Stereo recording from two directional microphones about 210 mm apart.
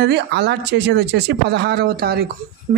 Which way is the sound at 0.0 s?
50° right (ahead or behind).